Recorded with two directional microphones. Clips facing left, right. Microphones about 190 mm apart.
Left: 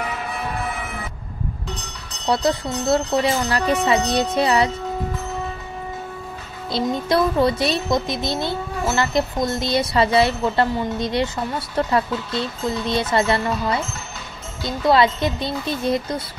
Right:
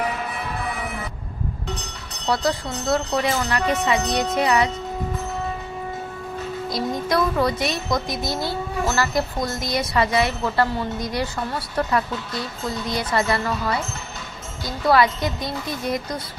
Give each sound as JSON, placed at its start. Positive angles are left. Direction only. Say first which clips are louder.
{"t": 2.2, "sound": "speech", "louder": "left 3 dB", "side_deg": 25}
{"t": 6.7, "sound": "speech", "louder": "left 4 dB", "side_deg": 25}